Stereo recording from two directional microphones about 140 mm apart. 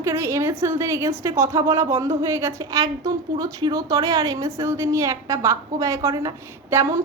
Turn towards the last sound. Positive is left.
turn(degrees=-20)  # may be behind; listen again after turning